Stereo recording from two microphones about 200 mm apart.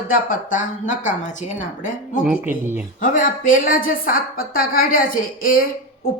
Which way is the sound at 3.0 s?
40° left (ahead or behind).